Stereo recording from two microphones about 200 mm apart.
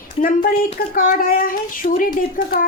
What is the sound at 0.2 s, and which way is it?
A woman's voice, 45° left (ahead or behind).